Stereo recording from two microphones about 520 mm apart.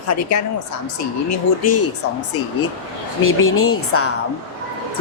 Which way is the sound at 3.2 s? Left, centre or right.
Left.